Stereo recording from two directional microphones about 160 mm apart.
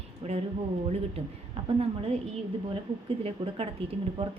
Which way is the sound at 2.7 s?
35° right (ahead or behind).